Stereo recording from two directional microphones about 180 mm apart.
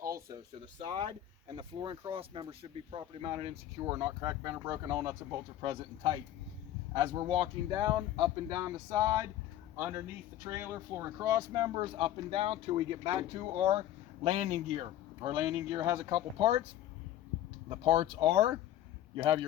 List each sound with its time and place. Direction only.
0.0 s a sound: 15° right (ahead or behind)
0.9 s speech: 30° right (ahead or behind)
4.2 s speech: 20° right (ahead or behind)
14.3 s speech: 40° right (ahead or behind)
15.2 s speech: 25° right (ahead or behind)
16.1 s speech: 30° right (ahead or behind)
17.9 s speech: 35° right (ahead or behind)
18.3 s speech: 25° right (ahead or behind)